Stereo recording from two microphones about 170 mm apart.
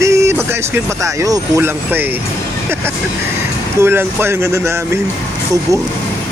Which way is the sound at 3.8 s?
15° right (ahead or behind).